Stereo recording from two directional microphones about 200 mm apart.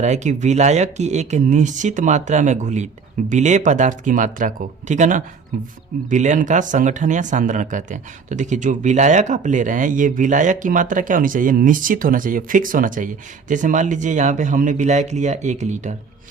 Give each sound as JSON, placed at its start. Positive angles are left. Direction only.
{"t": 0.0, "sound": "speech", "side_deg": -35}